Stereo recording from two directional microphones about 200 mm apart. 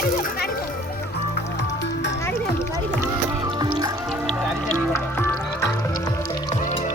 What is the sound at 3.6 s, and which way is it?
Music, 20° right (ahead or behind).